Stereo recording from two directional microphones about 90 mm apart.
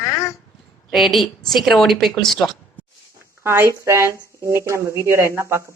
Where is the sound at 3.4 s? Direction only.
30° right (ahead or behind).